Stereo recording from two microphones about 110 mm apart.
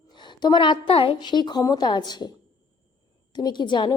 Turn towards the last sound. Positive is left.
turn(degrees=45)  # may be behind; listen again after turning